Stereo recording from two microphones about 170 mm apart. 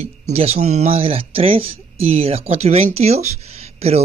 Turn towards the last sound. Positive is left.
turn(degrees=-40)  # may be behind; listen again after turning